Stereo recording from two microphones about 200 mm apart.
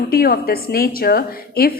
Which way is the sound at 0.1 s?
50° left (ahead or behind).